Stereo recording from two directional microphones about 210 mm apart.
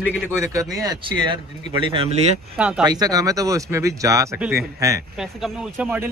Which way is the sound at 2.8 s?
20° right (ahead or behind).